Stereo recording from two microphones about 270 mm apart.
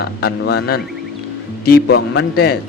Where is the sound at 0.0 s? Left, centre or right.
Left.